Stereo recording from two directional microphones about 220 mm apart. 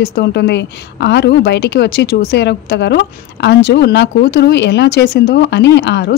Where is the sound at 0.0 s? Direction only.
50° left (ahead or behind).